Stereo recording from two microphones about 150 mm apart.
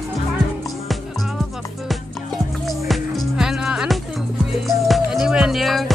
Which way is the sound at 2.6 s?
Centre (ahead or behind).